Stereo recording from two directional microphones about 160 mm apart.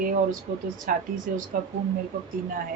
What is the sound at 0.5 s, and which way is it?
Speech, 50° right (ahead or behind).